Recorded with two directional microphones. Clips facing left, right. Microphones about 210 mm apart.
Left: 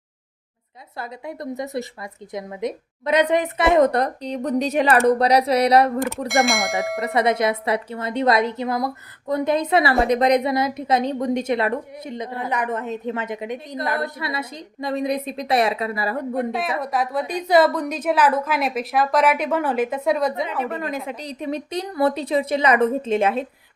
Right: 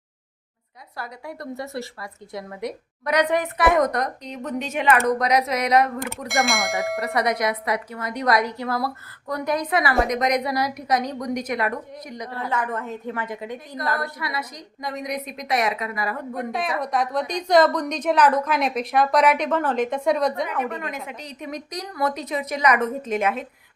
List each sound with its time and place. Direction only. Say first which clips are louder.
0.9 s a woman's voice: left 3 dB; 20° left (ahead or behind)
6.2 s a woman's voice: left 1 dB; centre (ahead or behind)
7.0 s a woman's voice: left 5 dB; 25° left (ahead or behind)
16.5 s a woman's voice: left 1 dB; centre (ahead or behind)
20.7 s a woman's voice: left 5 dB; 35° left (ahead or behind)